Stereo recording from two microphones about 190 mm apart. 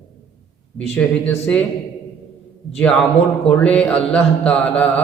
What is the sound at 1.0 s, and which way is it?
Speech, 10° left (ahead or behind).